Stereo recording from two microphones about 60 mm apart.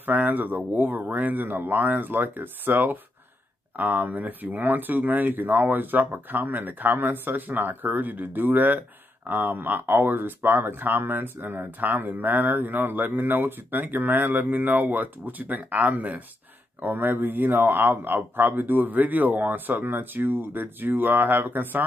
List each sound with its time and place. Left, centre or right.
0.0 s speech: right